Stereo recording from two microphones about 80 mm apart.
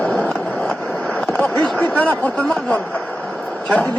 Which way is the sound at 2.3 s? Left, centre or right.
Centre.